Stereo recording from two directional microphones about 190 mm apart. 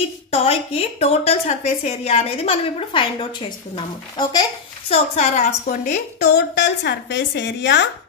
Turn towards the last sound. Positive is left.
turn(degrees=65)  # may be behind; listen again after turning